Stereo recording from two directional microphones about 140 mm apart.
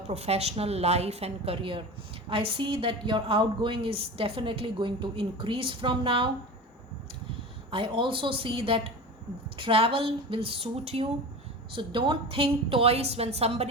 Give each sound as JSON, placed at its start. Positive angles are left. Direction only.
{"t": 0.1, "sound": "a woman's voice", "side_deg": -50}
{"t": 7.7, "sound": "a woman's voice", "side_deg": -40}
{"t": 11.7, "sound": "a woman's voice", "side_deg": -35}